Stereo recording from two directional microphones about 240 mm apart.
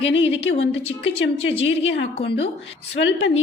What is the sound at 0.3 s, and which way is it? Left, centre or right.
Speech, left.